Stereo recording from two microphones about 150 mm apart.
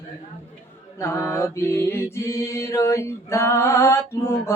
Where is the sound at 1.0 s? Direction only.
20° left (ahead or behind).